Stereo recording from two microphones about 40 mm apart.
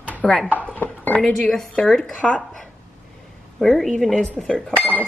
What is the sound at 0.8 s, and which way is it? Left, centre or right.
Dishes, left.